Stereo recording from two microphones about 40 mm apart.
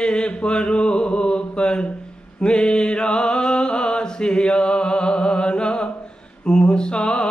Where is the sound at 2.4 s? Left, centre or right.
Left.